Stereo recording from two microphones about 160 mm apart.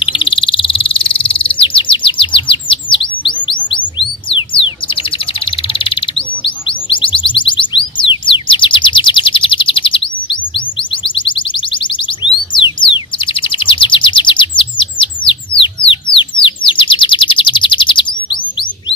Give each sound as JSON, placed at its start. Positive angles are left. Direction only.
{"t": 0.0, "sound": "bird", "side_deg": 30}
{"t": 10.5, "sound": "music", "side_deg": 30}
{"t": 16.4, "sound": "chirp", "side_deg": 30}